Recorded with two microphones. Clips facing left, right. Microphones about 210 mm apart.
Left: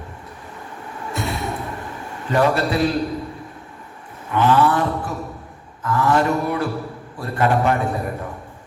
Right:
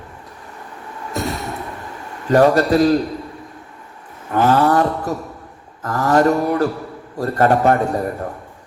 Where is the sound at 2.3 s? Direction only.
40° right (ahead or behind).